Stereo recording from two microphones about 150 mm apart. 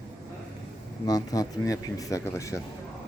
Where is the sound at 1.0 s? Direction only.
25° left (ahead or behind).